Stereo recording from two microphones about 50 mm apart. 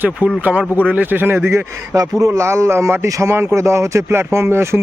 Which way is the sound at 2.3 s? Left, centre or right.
Right.